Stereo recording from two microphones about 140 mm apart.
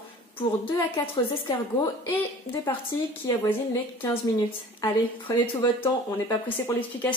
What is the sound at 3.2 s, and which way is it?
Speech, 20° left (ahead or behind).